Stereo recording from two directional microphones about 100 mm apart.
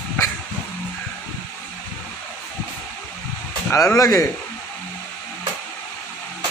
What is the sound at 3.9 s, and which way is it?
Speech, 35° left (ahead or behind).